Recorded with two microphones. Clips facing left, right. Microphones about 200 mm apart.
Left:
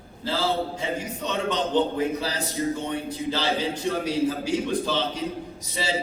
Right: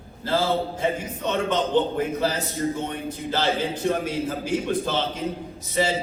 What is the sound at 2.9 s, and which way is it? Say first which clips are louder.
A man's voice: left 1 dB; 50° right (ahead or behind).